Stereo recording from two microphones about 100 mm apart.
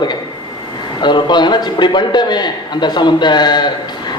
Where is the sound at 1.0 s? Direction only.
50° left (ahead or behind).